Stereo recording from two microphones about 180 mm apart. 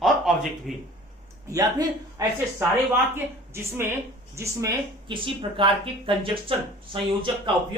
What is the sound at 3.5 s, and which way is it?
Speech, 15° right (ahead or behind).